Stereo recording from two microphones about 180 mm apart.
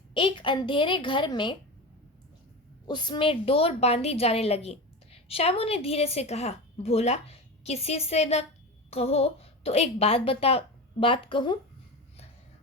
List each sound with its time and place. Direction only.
0.1 s a woman's voice: 30° left (ahead or behind)
2.8 s a woman's voice: 25° left (ahead or behind)